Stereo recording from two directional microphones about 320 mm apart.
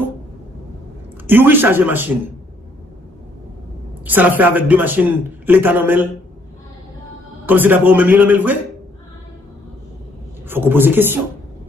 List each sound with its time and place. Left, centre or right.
1.2 s a man's voice: centre
4.0 s a man's voice: centre
7.4 s a man's voice: centre
10.5 s a man's voice: centre